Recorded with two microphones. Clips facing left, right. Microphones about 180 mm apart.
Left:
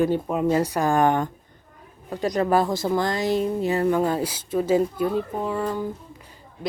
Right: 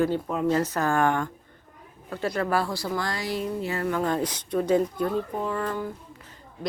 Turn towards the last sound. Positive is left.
turn(degrees=15)  # may be behind; listen again after turning